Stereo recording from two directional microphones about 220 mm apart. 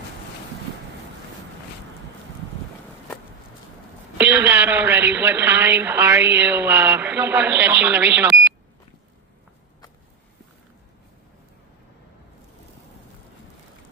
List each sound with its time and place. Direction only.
4.2 s a woman's voice: 10° right (ahead or behind)